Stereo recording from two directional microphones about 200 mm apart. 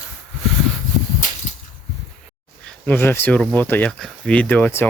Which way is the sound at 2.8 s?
10° left (ahead or behind).